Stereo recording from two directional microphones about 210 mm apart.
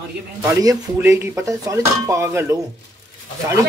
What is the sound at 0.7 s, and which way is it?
Speech, 10° right (ahead or behind).